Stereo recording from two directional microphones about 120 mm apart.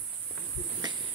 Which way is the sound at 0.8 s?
40° right (ahead or behind).